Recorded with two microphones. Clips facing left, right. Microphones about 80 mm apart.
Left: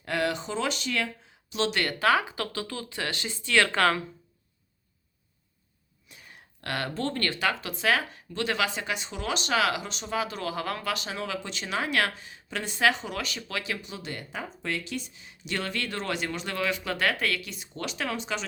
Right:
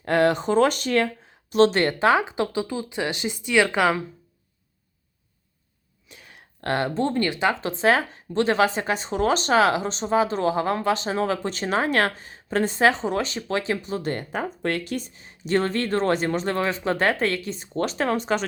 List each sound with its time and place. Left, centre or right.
0.0 s speech: right; by 4.0 s centre
6.1 s a sound: right
6.6 s speech: right